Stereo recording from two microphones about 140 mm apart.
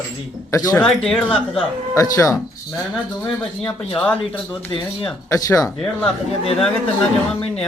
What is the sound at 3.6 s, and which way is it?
Speech, 10° left (ahead or behind).